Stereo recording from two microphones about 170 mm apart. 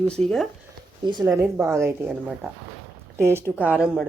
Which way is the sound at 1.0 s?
25° right (ahead or behind).